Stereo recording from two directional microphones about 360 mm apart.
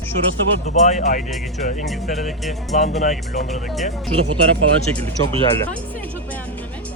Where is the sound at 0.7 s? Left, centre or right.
Centre.